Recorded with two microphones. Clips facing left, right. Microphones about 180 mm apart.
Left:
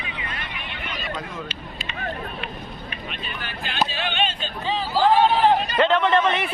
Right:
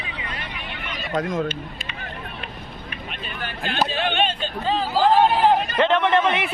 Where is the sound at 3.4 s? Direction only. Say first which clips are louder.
Right 2 dB; 50° right (ahead or behind).